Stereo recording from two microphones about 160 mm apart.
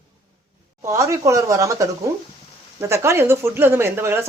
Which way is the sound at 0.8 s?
20° right (ahead or behind).